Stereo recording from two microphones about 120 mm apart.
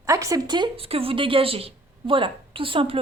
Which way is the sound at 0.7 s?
55° right (ahead or behind).